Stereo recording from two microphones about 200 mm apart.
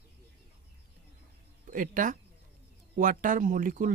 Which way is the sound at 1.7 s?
40° right (ahead or behind).